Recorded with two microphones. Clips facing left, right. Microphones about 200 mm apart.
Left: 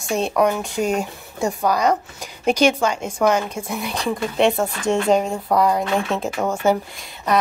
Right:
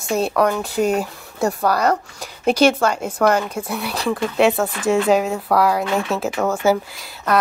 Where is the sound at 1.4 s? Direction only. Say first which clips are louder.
Right 1 dB; 15° left (ahead or behind).